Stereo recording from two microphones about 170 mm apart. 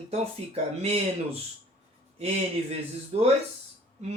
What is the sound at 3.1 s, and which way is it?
Speech, 35° right (ahead or behind).